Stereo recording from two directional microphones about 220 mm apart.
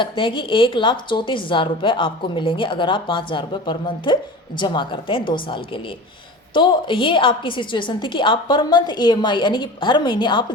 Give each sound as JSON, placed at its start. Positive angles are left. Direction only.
{"t": 0.0, "sound": "a woman's voice", "side_deg": 25}